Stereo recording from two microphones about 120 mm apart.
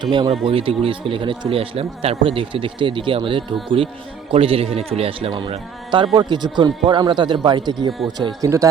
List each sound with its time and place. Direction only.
0.0 s speech: 45° right (ahead or behind)
5.3 s speech: 40° right (ahead or behind)